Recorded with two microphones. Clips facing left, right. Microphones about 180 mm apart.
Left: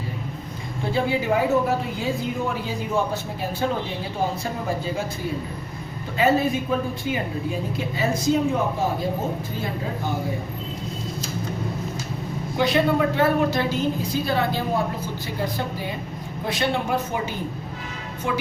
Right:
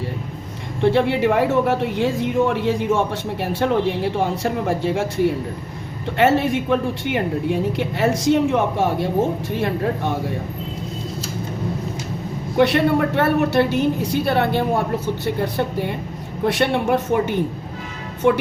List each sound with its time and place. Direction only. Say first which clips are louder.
0.8 s speech: right 7 dB; 75° right (ahead or behind)
9.5 s speech: right 7 dB; 80° right
12.5 s speech: right 4 dB; 70° right (ahead or behind)